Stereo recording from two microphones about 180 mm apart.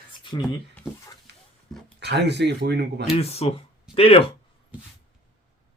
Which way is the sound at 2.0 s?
70° right (ahead or behind).